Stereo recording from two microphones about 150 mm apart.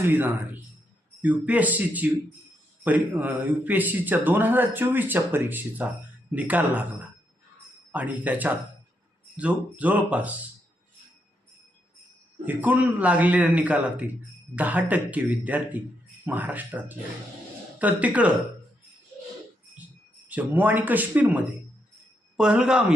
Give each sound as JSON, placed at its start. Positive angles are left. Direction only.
{"t": 0.0, "sound": "speech", "side_deg": -15}
{"t": 7.9, "sound": "speech", "side_deg": -10}
{"t": 12.5, "sound": "speech", "side_deg": -10}
{"t": 20.2, "sound": "speech", "side_deg": -10}